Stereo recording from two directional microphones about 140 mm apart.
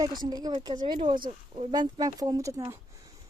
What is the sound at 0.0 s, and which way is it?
Speech, 30° right (ahead or behind).